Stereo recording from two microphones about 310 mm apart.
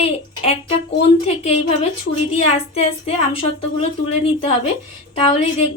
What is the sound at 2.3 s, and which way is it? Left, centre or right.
A woman's voice, centre.